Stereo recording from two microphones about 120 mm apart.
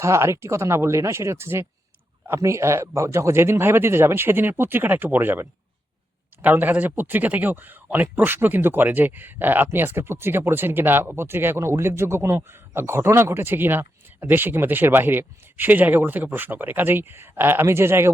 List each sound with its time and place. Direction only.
0.0 s speech: 25° right (ahead or behind)